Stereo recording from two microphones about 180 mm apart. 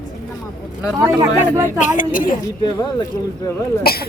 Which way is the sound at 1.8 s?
45° left (ahead or behind).